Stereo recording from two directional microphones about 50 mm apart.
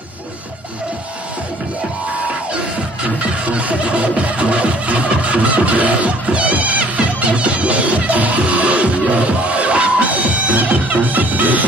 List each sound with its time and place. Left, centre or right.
3.2 s music: right